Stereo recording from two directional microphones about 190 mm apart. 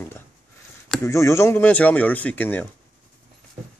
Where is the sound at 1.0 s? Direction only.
15° left (ahead or behind).